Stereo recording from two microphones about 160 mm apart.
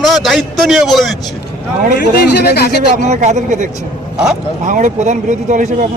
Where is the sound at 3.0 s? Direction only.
50° right (ahead or behind).